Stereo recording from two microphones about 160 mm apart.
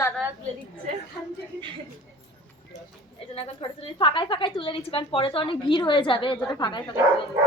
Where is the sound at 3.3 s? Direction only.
35° left (ahead or behind).